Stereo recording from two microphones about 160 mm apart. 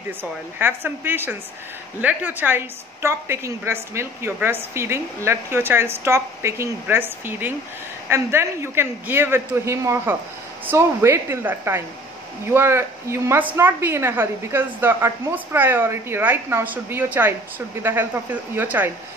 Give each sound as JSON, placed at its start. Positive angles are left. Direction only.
{"t": 0.2, "sound": "a woman's voice", "side_deg": -15}